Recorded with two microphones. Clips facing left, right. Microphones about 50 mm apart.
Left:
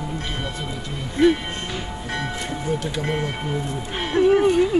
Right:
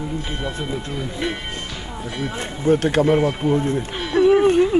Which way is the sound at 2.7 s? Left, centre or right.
Right.